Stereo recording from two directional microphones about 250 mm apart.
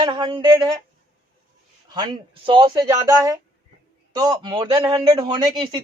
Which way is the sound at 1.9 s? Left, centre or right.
Centre.